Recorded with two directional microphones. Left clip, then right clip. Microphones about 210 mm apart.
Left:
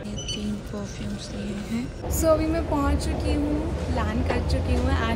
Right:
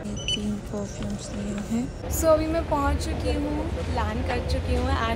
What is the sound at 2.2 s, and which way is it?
A woman's voice, 5° left (ahead or behind).